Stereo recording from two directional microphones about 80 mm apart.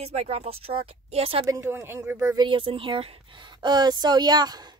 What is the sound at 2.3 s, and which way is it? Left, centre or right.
Speech, right.